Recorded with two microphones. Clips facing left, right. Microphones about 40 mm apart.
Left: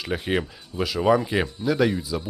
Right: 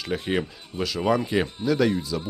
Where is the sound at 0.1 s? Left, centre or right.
Centre.